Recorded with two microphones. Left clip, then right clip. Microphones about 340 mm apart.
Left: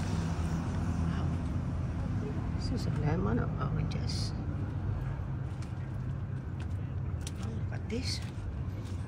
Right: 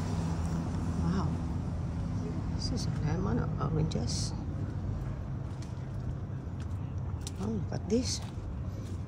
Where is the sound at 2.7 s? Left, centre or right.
Centre.